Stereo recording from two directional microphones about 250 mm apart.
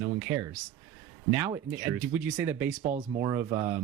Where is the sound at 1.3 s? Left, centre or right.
Centre.